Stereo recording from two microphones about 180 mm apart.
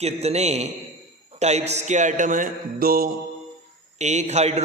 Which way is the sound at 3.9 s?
40° right (ahead or behind).